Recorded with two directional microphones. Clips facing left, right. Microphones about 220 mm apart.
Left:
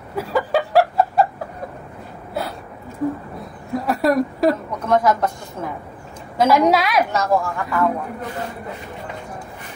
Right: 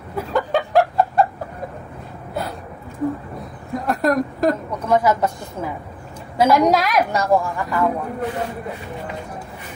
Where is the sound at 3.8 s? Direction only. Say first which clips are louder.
Left 1 dB; centre (ahead or behind).